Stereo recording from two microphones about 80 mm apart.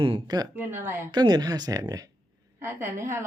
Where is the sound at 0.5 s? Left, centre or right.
Right.